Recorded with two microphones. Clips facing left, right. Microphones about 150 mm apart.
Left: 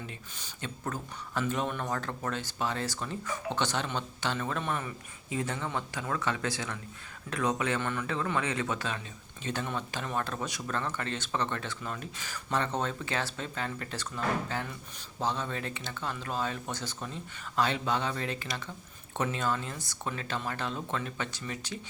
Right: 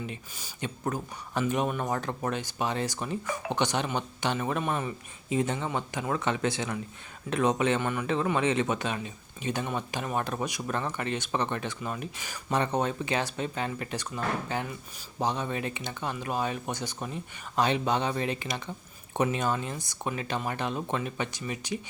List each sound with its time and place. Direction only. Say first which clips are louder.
0.0 s speech: right 5 dB; 10° right (ahead or behind)